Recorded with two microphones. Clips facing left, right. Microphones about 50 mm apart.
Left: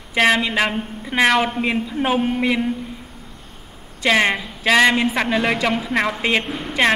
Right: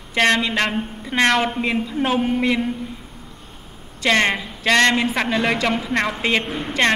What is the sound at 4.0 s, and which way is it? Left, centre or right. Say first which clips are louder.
A woman's voice: left 1 dB; centre.